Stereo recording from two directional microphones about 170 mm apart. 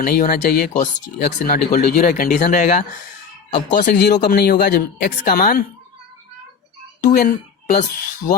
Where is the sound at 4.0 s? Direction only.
70° left (ahead or behind).